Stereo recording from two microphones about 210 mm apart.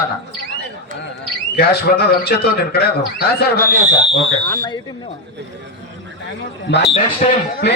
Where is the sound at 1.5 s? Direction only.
50° left (ahead or behind).